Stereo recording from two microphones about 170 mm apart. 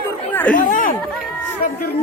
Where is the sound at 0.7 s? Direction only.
50° left (ahead or behind).